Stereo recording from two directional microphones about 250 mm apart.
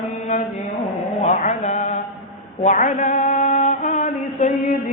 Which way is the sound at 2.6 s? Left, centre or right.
Left.